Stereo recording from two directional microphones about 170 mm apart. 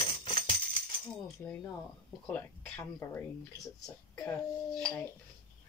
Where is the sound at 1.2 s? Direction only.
10° left (ahead or behind).